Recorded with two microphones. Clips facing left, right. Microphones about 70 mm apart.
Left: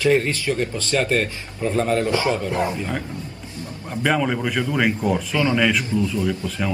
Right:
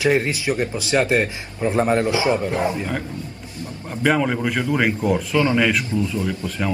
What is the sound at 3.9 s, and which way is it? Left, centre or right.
Mantra, centre.